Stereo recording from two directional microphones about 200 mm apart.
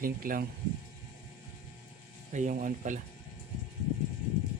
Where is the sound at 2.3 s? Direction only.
40° right (ahead or behind).